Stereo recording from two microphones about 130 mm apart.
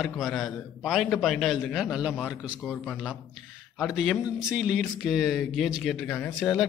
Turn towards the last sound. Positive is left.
turn(degrees=0)  # may be behind; listen again after turning